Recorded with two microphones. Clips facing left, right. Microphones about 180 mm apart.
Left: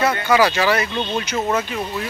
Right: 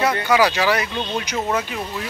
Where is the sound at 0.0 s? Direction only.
10° right (ahead or behind).